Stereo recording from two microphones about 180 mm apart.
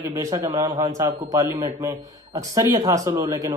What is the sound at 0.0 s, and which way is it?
Speech, 20° right (ahead or behind).